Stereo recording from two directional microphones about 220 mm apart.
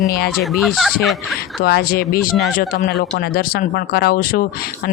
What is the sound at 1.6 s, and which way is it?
Speech, 45° left (ahead or behind).